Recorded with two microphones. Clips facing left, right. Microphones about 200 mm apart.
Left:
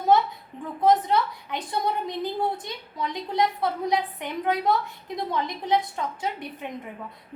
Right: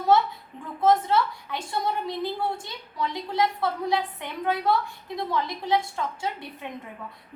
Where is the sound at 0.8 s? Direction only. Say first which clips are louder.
Even; 15° left (ahead or behind).